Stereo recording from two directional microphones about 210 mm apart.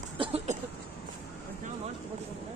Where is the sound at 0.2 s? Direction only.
30° right (ahead or behind).